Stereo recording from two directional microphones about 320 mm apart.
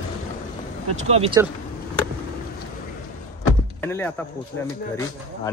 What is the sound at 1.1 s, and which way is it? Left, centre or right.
Speech, centre.